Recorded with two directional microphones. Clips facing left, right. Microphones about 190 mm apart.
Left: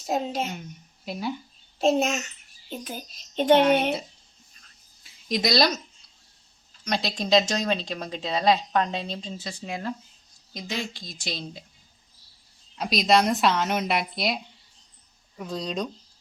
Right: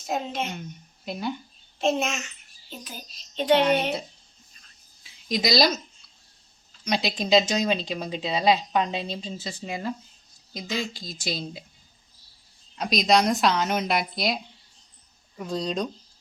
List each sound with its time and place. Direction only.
0.0 s a child's voice: 35° left (ahead or behind)
0.4 s speech: 5° left (ahead or behind)
1.8 s a child's voice: 35° left (ahead or behind)
2.6 s a child's voice: 50° left (ahead or behind)
5.0 s a woman's voice: centre (ahead or behind)
6.8 s speech: centre (ahead or behind)
12.7 s speech: centre (ahead or behind)